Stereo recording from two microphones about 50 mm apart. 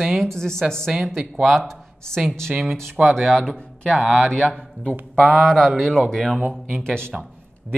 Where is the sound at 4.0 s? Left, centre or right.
Centre.